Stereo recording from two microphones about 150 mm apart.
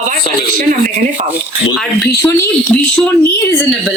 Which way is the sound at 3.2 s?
15° left (ahead or behind).